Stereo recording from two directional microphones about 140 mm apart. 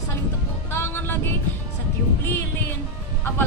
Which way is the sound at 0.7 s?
15° left (ahead or behind).